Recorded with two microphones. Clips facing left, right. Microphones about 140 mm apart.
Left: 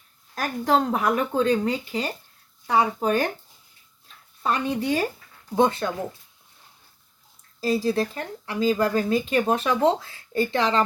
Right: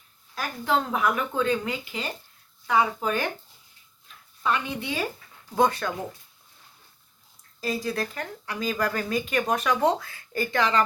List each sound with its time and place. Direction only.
0.3 s speech: 40° left (ahead or behind)
4.4 s speech: 40° left (ahead or behind)
5.5 s speech: 25° left (ahead or behind)
7.6 s speech: 30° left (ahead or behind)